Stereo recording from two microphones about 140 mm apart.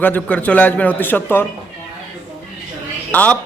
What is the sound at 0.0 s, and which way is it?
A man's voice, 10° left (ahead or behind).